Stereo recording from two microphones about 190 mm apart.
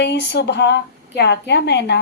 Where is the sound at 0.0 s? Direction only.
60° left (ahead or behind).